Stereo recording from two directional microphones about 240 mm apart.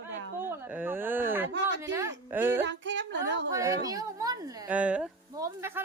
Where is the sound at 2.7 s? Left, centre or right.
Right.